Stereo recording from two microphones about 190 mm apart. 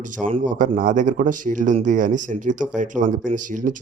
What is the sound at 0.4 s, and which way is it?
A man's voice, 45° right (ahead or behind).